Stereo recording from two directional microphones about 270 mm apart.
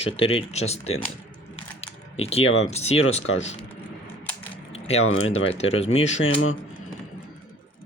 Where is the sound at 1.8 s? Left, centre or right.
Left.